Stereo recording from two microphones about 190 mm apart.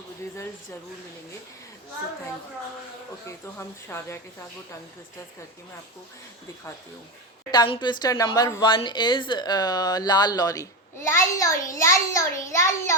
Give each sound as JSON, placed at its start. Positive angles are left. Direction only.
{"t": 3.2, "sound": "speech", "side_deg": 15}
{"t": 7.5, "sound": "speech", "side_deg": 25}